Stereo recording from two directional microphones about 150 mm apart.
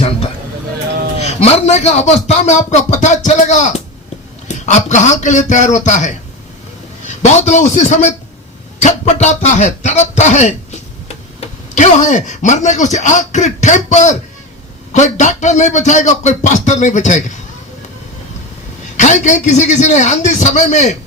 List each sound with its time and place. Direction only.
1.2 s a man's voice: 45° left (ahead or behind)
18.9 s a man's voice: 55° left (ahead or behind)